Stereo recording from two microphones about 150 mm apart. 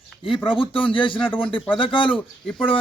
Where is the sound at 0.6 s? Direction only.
35° left (ahead or behind).